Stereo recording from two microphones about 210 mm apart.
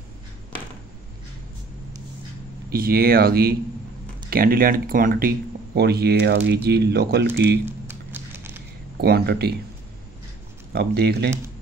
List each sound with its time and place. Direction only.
2.7 s speech: 45° right (ahead or behind)
7.9 s music: 10° right (ahead or behind)
8.9 s speech: 50° right (ahead or behind)
10.7 s speech: 50° right (ahead or behind)